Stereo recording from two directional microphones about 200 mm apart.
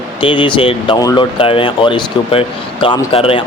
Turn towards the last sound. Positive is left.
turn(degrees=30)  # may be behind; listen again after turning